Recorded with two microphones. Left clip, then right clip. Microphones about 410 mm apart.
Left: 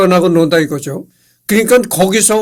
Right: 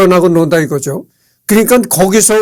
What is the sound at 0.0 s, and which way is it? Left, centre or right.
Speech, right.